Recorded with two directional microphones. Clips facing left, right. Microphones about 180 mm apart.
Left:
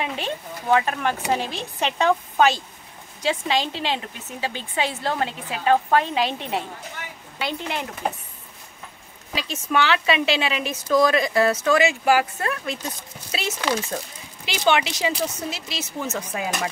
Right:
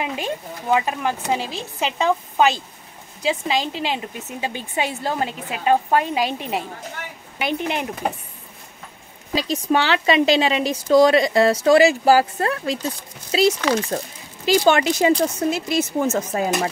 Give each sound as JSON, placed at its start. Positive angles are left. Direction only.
{"t": 0.0, "sound": "a woman's voice", "side_deg": -10}
{"t": 9.3, "sound": "speech", "side_deg": -35}